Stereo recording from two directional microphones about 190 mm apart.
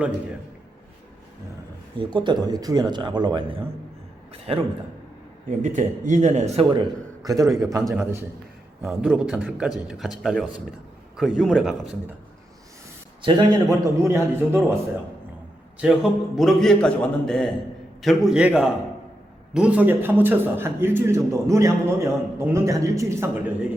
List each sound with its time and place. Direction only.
2.0 s a man's voice: 25° right (ahead or behind)
5.6 s speech: 40° right (ahead or behind)
7.3 s a man's voice: 15° right (ahead or behind)
13.2 s a man's voice: 20° right (ahead or behind)
15.8 s a man's voice: centre (ahead or behind)